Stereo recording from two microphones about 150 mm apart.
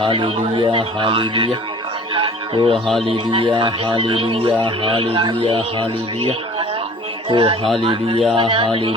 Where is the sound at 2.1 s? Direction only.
35° right (ahead or behind).